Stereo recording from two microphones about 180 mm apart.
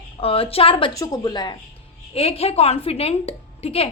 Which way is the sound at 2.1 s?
35° left (ahead or behind).